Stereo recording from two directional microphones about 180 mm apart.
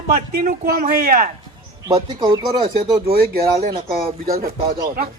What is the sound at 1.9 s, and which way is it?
Speech, 25° right (ahead or behind).